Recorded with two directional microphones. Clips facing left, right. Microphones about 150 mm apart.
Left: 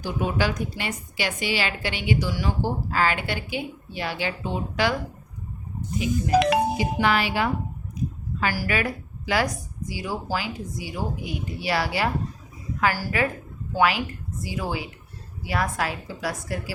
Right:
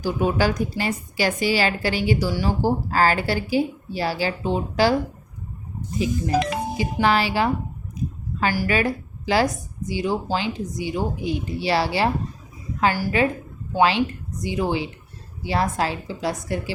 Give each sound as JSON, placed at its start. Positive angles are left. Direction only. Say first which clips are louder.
{"t": 0.0, "sound": "speech", "louder": "right 4 dB", "side_deg": -40}
{"t": 7.0, "sound": "a woman's voice", "louder": "right 4 dB", "side_deg": -30}